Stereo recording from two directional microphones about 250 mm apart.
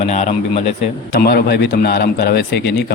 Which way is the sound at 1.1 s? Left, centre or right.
Left.